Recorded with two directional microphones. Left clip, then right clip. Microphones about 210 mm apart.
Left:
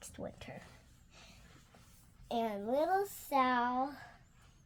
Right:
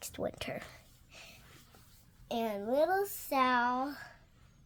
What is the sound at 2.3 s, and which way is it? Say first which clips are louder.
Speech: right 1 dB; 10° right (ahead or behind).